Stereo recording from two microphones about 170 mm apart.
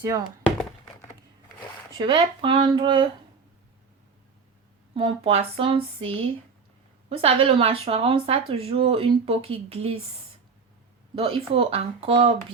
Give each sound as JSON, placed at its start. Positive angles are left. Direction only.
{"t": 0.0, "sound": "speech", "side_deg": -20}
{"t": 2.0, "sound": "speech", "side_deg": -30}
{"t": 4.9, "sound": "speech", "side_deg": -35}
{"t": 11.1, "sound": "speech", "side_deg": -35}